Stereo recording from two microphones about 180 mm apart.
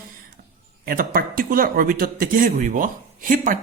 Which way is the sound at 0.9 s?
55° right (ahead or behind).